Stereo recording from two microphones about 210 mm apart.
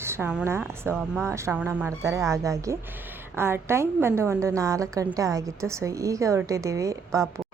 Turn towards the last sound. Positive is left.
turn(degrees=-15)  # may be behind; listen again after turning